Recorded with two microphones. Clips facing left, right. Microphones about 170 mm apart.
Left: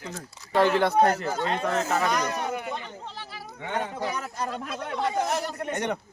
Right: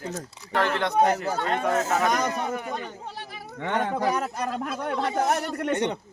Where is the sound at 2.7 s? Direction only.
55° right (ahead or behind).